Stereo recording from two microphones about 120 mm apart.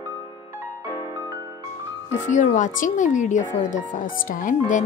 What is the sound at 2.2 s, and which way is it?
Speech, 90° left.